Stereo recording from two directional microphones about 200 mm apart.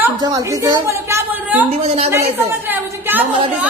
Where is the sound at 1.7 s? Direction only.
30° right (ahead or behind).